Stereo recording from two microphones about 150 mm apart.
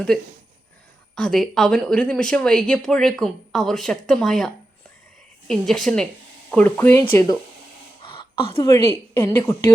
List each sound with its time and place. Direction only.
1.1 s a woman's voice: 5° left (ahead or behind); by 7.3 s 20° left (ahead or behind)
8.0 s a sound: 35° left (ahead or behind)
8.5 s a woman's voice: 20° left (ahead or behind)